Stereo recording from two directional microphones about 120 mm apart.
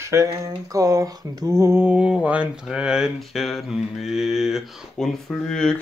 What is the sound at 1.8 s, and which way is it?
Speech, 10° right (ahead or behind).